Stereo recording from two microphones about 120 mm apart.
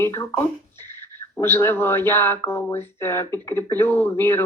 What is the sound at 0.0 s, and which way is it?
Speech, 20° left (ahead or behind).